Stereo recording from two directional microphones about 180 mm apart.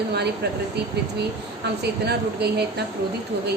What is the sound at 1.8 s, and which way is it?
A woman's voice, 65° right (ahead or behind).